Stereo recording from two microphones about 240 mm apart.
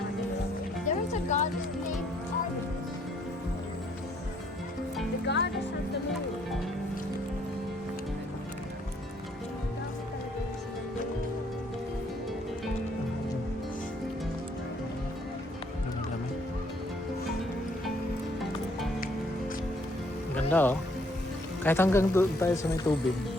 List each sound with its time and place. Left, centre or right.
0.9 s music: left
5.2 s music: left
20.3 s music: centre
21.6 s speech: centre